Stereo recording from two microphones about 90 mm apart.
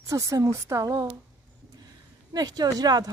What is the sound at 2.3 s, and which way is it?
Speech, 50° right (ahead or behind).